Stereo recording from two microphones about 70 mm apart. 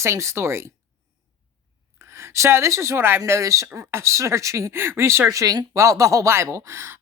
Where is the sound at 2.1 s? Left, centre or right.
Right.